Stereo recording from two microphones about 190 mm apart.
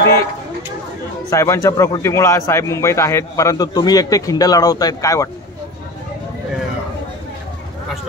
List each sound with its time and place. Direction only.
1.3 s a man's voice: 15° left (ahead or behind)